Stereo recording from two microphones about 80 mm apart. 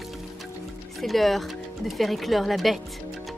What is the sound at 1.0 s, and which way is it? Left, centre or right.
Speech, centre.